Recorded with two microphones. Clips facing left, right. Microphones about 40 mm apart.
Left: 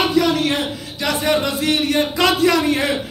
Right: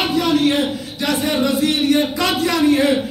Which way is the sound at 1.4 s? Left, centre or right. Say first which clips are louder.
Right 2 dB; left.